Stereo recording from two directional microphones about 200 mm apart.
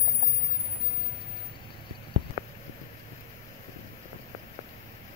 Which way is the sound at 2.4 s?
20° right (ahead or behind).